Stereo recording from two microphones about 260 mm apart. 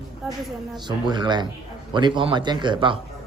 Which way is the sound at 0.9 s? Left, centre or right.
Centre.